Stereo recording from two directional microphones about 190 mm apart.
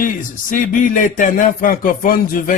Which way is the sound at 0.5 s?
45° left (ahead or behind).